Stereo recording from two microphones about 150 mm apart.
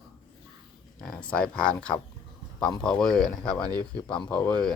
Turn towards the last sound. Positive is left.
turn(degrees=5)  # may be behind; listen again after turning